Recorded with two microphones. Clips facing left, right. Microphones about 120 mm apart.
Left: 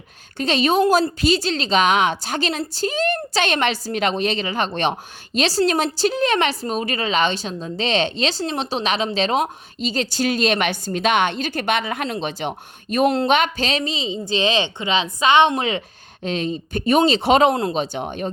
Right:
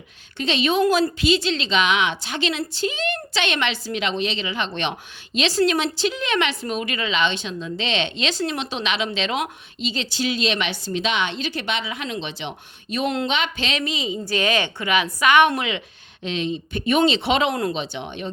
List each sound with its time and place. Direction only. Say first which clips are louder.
0.3 s a woman's voice: left 3 dB; 40° left (ahead or behind); by 15.6 s 25° left (ahead or behind)
16.2 s a woman's voice: left 2 dB; 40° left (ahead or behind)
17.5 s speech: left 2 dB; 25° left (ahead or behind)
17.7 s speech: left 5 dB; 45° left (ahead or behind)